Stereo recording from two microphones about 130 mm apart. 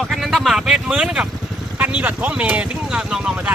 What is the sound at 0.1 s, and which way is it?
Speech, centre (ahead or behind).